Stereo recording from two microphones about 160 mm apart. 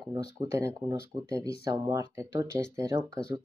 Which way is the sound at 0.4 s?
20° right (ahead or behind).